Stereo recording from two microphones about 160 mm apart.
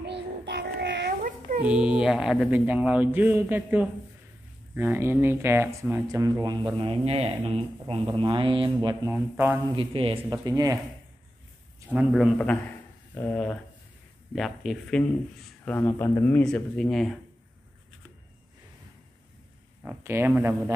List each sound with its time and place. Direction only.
0.0 s child singing: 90° right
1.6 s speech: 5° right (ahead or behind); by 8.9 s 30° right (ahead or behind)
9.0 s speech: 15° right (ahead or behind)
9.7 s speech: 35° right (ahead or behind)
10.4 s speech: 20° right (ahead or behind)
11.9 s speech: 5° right (ahead or behind)
13.1 s speech: 15° left (ahead or behind)
19.8 s speech: 10° right (ahead or behind)